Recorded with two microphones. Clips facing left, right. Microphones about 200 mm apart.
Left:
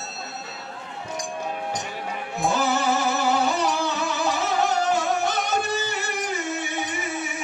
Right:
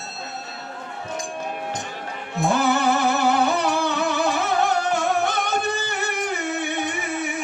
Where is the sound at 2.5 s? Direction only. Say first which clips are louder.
Right 3 dB; 60° right (ahead or behind).